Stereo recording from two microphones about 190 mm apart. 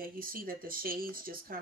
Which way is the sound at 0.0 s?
50° right (ahead or behind).